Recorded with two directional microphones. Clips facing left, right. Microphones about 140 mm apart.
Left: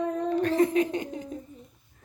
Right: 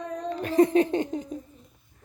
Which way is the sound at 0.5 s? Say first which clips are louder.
Right 8 dB; 25° right (ahead or behind).